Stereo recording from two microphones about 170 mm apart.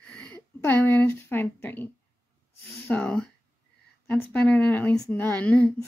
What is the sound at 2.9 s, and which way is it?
Speech, 5° left (ahead or behind).